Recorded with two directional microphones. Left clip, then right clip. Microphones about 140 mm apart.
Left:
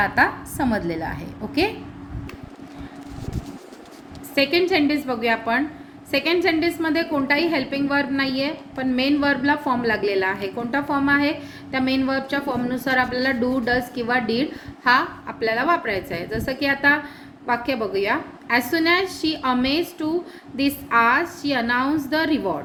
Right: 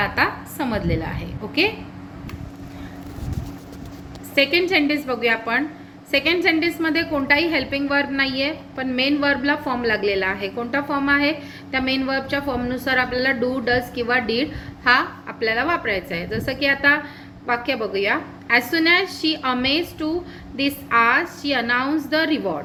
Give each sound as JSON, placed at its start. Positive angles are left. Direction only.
{"t": 0.0, "sound": "a woman's voice", "side_deg": 75}
{"t": 4.7, "sound": "a woman's voice", "side_deg": 50}